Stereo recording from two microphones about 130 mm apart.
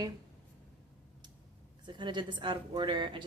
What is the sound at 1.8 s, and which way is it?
Speech, 35° right (ahead or behind).